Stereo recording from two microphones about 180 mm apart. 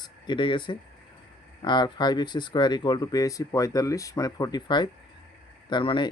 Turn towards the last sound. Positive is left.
turn(degrees=25)  # may be behind; listen again after turning